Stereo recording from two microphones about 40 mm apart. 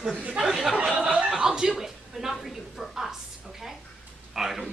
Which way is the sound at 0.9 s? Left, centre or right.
Right.